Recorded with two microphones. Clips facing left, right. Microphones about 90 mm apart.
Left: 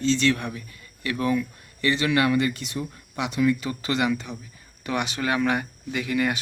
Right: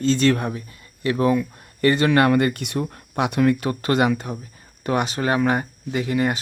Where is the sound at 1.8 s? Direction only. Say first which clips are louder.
Right 5 dB; 45° right (ahead or behind).